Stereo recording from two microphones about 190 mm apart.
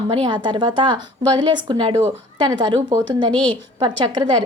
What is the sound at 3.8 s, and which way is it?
Speech, 25° right (ahead or behind).